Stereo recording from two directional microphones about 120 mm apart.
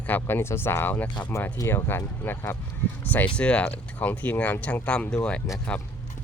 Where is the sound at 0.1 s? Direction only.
20° left (ahead or behind).